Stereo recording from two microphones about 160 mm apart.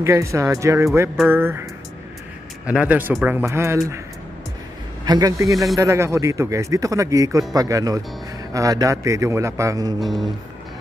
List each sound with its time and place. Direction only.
0.0 s speech: 20° right (ahead or behind)
5.0 s speech: 25° right (ahead or behind)
9.9 s music: centre (ahead or behind)